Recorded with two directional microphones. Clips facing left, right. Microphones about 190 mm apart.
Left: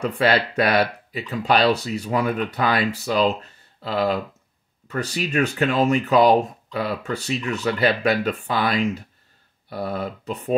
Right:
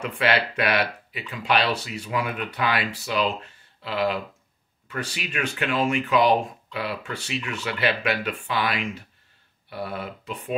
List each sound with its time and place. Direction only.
0.0 s speech: 40° left (ahead or behind)